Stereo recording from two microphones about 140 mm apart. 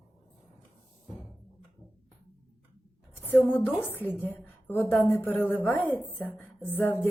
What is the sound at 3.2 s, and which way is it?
A woman's voice, 15° left (ahead or behind).